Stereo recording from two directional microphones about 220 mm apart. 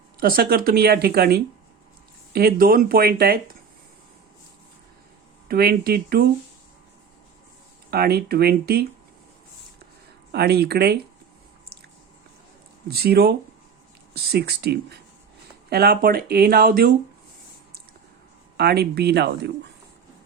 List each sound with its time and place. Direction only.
0.2 s speech: 40° right (ahead or behind)
5.5 s speech: 45° right (ahead or behind)
7.9 s speech: 45° right (ahead or behind)
10.3 s speech: 45° right (ahead or behind)
12.9 s speech: 45° right (ahead or behind)
18.5 s speech: 45° right (ahead or behind)